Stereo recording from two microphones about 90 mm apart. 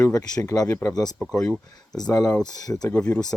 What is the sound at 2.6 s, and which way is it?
Speech, 45° left (ahead or behind).